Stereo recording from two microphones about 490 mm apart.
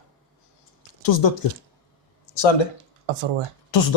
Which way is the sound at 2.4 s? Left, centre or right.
Left.